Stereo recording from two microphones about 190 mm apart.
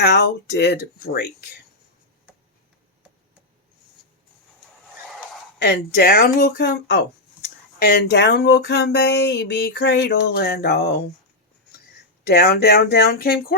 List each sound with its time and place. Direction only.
0.0 s speech: 60° left (ahead or behind)
5.6 s speech: 55° left (ahead or behind)
7.4 s speech: 50° left (ahead or behind)
12.2 s speech: 55° left (ahead or behind)